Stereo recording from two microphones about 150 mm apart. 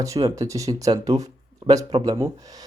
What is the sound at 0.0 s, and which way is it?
Speech, 20° right (ahead or behind).